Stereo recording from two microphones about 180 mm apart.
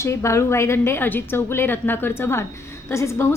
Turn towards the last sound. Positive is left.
turn(degrees=15)  # may be behind; listen again after turning